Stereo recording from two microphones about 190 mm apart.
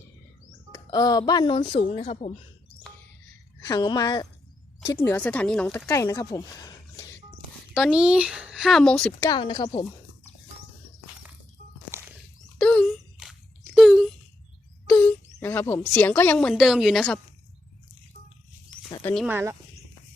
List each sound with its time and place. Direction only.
0.7 s speech: 20° left (ahead or behind); by 2.3 s 35° left (ahead or behind)
3.7 s speech: 20° left (ahead or behind); by 5.8 s 5° left (ahead or behind)
5.9 s speech: 15° left (ahead or behind)
7.7 s speech: 5° right (ahead or behind)
9.3 s speech: 25° left (ahead or behind)
12.5 s a sound: 5° left (ahead or behind)
13.1 s a sound: 5° right (ahead or behind)
14.8 s a sound: 10° left (ahead or behind)
15.9 s speech: 10° left (ahead or behind)
19.2 s speech: 10° right (ahead or behind)